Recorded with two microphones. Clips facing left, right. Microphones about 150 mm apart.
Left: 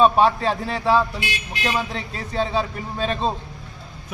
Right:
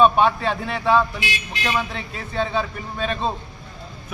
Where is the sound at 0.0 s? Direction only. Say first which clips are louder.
Even; 35° left (ahead or behind).